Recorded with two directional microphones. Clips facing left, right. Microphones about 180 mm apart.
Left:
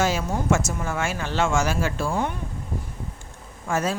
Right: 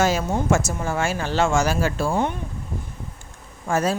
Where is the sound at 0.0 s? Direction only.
40° right (ahead or behind).